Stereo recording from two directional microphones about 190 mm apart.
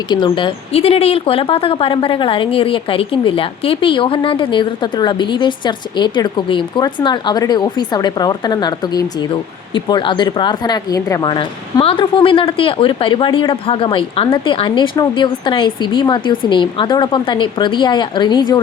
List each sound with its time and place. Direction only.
0.1 s a woman's voice: 25° left (ahead or behind)